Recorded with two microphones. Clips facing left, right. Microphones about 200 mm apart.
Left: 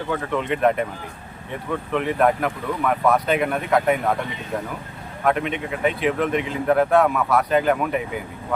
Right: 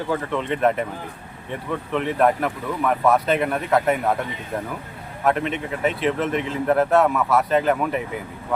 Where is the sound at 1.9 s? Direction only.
Centre (ahead or behind).